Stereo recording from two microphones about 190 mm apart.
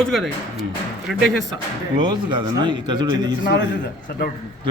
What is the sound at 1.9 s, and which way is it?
A man's voice, 25° right (ahead or behind).